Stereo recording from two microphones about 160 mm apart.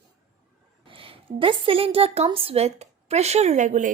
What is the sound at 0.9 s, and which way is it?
A woman's voice, 35° right (ahead or behind).